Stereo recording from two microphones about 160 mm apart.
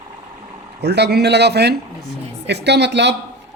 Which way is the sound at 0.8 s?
90° right.